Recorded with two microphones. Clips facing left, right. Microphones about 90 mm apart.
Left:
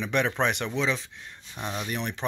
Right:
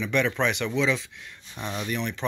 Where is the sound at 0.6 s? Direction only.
35° left (ahead or behind).